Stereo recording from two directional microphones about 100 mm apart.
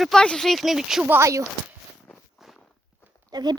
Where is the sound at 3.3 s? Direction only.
45° right (ahead or behind).